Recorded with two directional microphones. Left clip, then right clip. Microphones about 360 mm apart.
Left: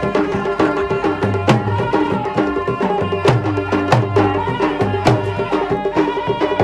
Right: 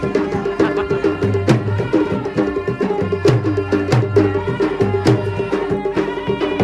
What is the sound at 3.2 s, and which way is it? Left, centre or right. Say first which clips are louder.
Music: right 2 dB; centre.